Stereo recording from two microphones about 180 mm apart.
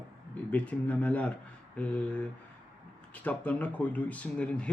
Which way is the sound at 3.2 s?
10° left (ahead or behind).